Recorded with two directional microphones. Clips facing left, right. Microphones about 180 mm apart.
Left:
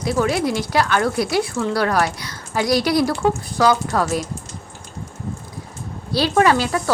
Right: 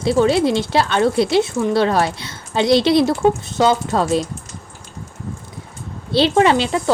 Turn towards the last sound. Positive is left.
turn(degrees=-20)  # may be behind; listen again after turning